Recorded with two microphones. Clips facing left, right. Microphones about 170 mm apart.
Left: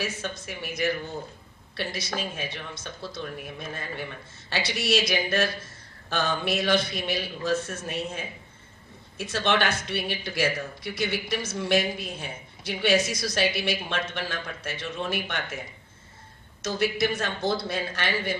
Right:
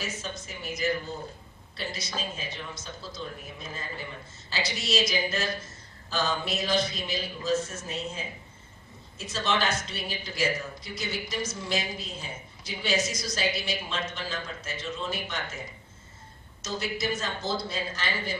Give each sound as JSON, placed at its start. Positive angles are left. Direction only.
{"t": 0.4, "sound": "a man's voice", "side_deg": 60}
{"t": 9.3, "sound": "a man's voice", "side_deg": 60}
{"t": 16.6, "sound": "a man's voice", "side_deg": 60}